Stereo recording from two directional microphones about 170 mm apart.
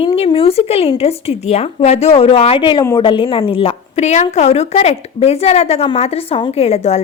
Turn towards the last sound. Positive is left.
turn(degrees=40)  # may be behind; listen again after turning